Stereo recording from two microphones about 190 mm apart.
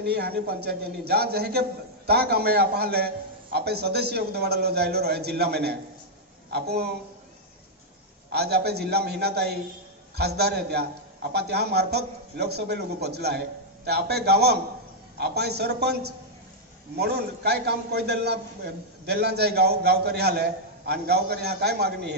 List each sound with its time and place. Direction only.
0.0 s a man's voice: 55° right (ahead or behind)
8.3 s a man's voice: 60° right (ahead or behind)